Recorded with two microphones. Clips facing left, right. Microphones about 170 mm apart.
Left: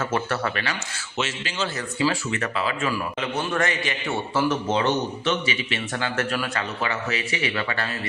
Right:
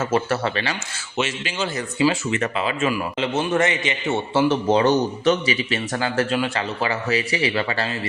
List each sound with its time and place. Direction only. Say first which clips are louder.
0.0 s speech: right 4 dB; 25° right (ahead or behind)
1.2 s speech: right 3 dB; 15° right (ahead or behind); by 6.2 s 35° right (ahead or behind)
6.3 s speech: right 4 dB; 25° right (ahead or behind)